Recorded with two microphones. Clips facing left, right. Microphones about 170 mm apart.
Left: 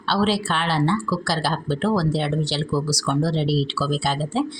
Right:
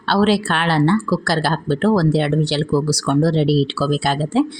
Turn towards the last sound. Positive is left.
turn(degrees=-60)  # may be behind; listen again after turning